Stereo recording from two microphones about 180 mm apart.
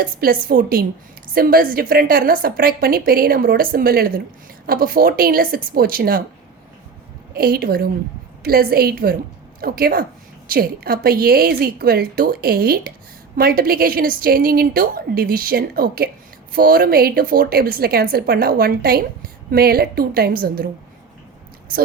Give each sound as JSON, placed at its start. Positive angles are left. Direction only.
{"t": 0.0, "sound": "a woman's voice", "side_deg": -55}
{"t": 7.3, "sound": "a woman's voice", "side_deg": -55}